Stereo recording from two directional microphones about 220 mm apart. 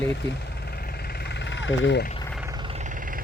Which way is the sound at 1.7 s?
55° left (ahead or behind).